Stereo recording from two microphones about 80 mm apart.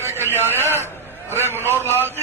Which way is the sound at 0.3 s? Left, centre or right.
Right.